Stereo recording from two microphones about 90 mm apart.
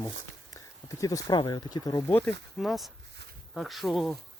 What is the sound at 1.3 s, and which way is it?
Speech, 55° left (ahead or behind).